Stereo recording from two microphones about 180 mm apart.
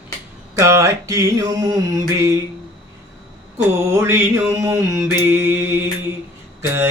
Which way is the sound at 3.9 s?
15° right (ahead or behind).